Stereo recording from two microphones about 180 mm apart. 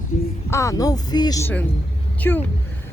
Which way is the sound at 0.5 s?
15° left (ahead or behind).